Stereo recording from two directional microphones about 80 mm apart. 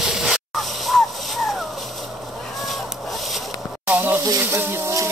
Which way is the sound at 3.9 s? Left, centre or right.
Right.